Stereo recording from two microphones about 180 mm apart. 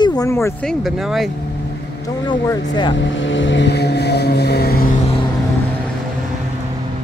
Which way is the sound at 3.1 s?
90° left.